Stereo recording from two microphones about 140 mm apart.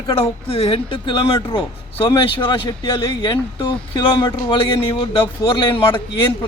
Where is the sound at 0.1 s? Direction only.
45° left (ahead or behind).